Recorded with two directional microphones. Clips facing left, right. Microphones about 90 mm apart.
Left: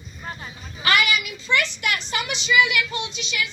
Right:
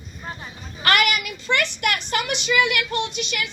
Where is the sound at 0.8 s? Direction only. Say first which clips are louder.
Right 1 dB; 55° right (ahead or behind).